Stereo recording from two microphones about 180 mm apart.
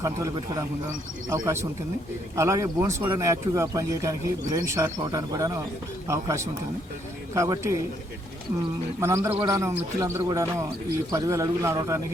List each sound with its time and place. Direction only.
0.0 s a man's voice: 20° right (ahead or behind)
9.0 s speech: 15° right (ahead or behind)